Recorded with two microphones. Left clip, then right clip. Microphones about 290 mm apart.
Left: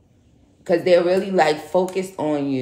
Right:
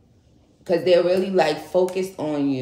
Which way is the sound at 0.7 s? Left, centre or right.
Centre.